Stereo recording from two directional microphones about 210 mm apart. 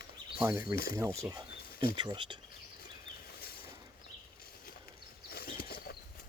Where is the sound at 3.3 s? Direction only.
45° left (ahead or behind).